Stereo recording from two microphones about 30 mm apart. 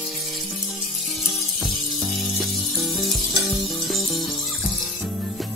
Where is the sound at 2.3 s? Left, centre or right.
Centre.